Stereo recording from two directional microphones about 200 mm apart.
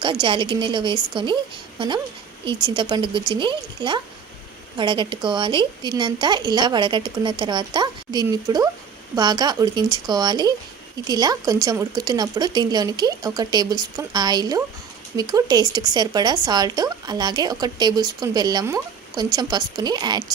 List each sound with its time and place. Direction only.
0.0 s speech: 25° right (ahead or behind)